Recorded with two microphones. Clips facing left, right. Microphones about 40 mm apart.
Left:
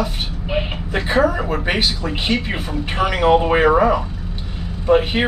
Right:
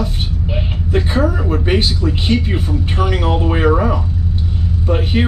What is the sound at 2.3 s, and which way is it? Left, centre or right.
Speech, left.